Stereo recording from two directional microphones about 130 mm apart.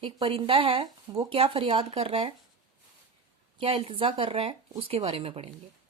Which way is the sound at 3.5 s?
50° right (ahead or behind).